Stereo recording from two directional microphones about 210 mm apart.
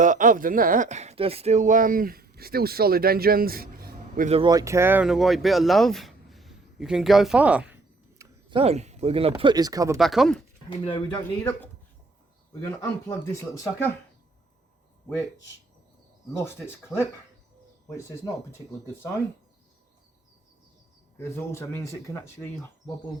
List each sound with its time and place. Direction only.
0.0 s speech: 40° right (ahead or behind)
4.3 s speech: 25° right (ahead or behind); by 7.8 s 5° right (ahead or behind)
8.2 s speech: 25° right (ahead or behind)
10.0 s speech: centre (ahead or behind)
10.7 s speech: 25° left (ahead or behind)
11.2 s speech: 10° left (ahead or behind)
16.9 s speech: centre (ahead or behind)
21.2 s speech: 10° left (ahead or behind)